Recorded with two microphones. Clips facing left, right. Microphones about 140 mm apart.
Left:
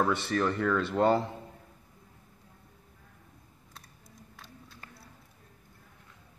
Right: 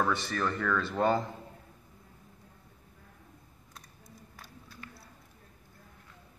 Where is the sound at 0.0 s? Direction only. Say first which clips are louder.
Left 3 dB; 25° left (ahead or behind).